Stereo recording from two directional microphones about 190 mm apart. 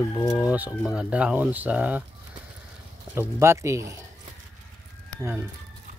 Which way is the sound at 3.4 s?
15° right (ahead or behind).